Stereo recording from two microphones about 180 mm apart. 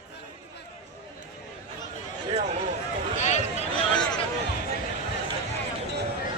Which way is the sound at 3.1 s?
40° left (ahead or behind).